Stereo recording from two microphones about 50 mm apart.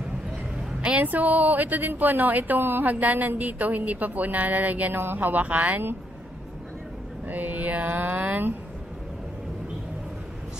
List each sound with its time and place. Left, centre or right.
0.7 s a sound: right
1.0 s a woman's voice: right
7.2 s a woman's voice: right